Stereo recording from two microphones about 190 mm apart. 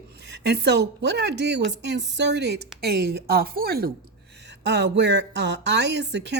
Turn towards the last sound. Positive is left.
turn(degrees=-65)  # may be behind; listen again after turning